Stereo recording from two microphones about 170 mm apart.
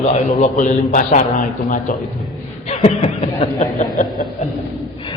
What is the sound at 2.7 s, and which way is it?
A man's voice, 40° left (ahead or behind).